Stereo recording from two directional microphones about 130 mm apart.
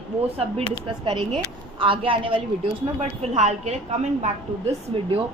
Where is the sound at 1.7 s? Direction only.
40° right (ahead or behind).